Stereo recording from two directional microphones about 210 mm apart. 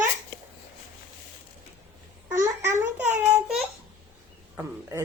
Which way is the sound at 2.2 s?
15° right (ahead or behind).